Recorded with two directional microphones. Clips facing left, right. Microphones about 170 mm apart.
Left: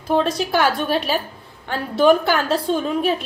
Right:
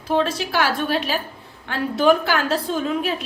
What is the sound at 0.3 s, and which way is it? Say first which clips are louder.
A woman's voice: left 3 dB; 40° left (ahead or behind).